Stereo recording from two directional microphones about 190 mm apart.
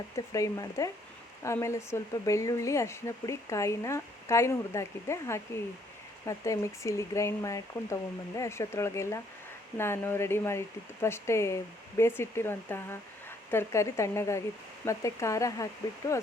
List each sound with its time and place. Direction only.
0.3 s speech: 15° left (ahead or behind)